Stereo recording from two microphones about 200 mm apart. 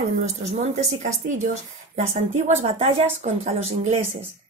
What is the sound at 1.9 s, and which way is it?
A woman's voice, 35° right (ahead or behind).